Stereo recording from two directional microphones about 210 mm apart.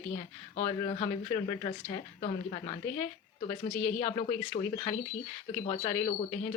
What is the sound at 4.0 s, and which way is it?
Speech, 25° left (ahead or behind).